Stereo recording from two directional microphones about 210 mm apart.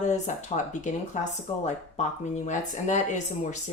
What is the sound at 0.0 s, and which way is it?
Speech, 35° left (ahead or behind).